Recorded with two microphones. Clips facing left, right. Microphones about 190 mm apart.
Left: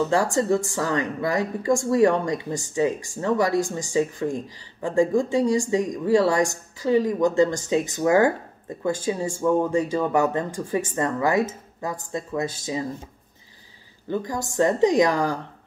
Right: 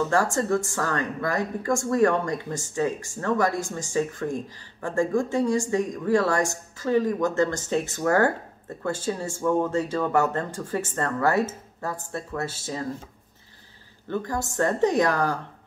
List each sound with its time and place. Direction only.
0.1 s speech: 15° left (ahead or behind)
14.0 s speech: 15° left (ahead or behind)